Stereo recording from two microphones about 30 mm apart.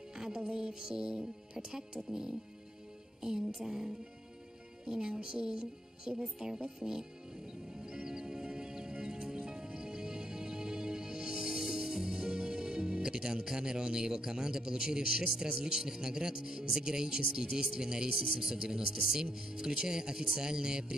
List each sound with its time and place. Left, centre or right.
0.1 s music: right
6.2 s speech: centre
6.8 s music: centre